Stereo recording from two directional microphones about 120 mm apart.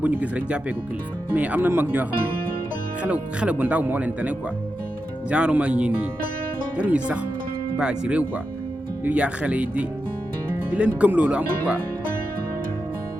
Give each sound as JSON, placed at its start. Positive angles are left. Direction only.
{"t": 0.0, "sound": "speech", "side_deg": -10}